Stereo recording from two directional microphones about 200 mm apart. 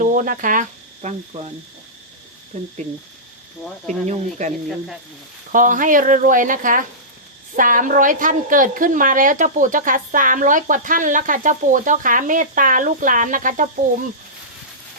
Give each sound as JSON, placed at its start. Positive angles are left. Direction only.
{"t": 0.0, "sound": "a woman's voice", "side_deg": -40}
{"t": 2.5, "sound": "a woman's voice", "side_deg": -35}
{"t": 3.6, "sound": "cricket", "side_deg": 5}
{"t": 4.1, "sound": "a woman's voice", "side_deg": -35}